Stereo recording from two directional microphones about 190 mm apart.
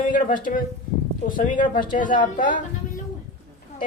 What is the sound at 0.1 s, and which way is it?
A man's voice, 45° left (ahead or behind).